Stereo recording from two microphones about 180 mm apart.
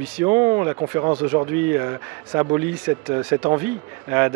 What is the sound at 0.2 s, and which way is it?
A man's voice, 15° right (ahead or behind).